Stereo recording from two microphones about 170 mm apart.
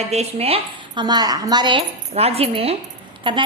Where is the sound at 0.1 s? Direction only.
40° right (ahead or behind).